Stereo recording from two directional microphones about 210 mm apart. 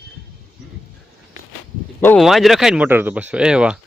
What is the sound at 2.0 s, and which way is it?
Speech, 5° left (ahead or behind).